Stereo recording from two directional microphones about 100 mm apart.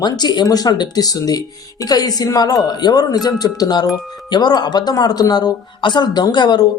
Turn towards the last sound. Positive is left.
turn(degrees=45)  # may be behind; listen again after turning